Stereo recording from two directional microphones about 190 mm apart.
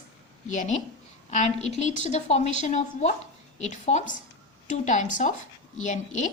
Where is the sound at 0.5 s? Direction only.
40° left (ahead or behind).